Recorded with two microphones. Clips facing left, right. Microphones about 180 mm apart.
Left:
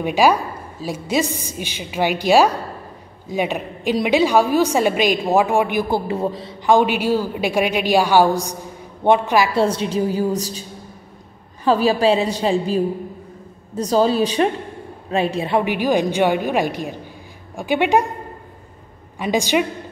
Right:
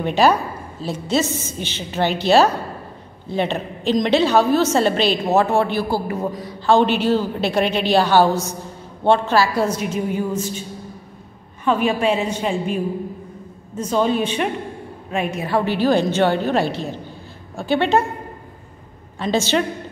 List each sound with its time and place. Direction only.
0.0 s a woman's voice: 10° left (ahead or behind); by 6.5 s 30° left (ahead or behind)
6.6 s a woman's voice: 10° left (ahead or behind)
9.6 s a woman's voice: 30° left (ahead or behind)
11.6 s a woman's voice: 35° left (ahead or behind); by 18.0 s 15° left (ahead or behind)
19.1 s a woman's voice: 15° left (ahead or behind)